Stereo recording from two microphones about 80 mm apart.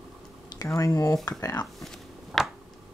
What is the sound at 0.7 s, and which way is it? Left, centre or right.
Speech, left.